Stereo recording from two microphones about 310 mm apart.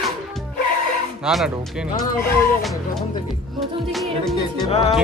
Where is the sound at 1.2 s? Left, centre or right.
Centre.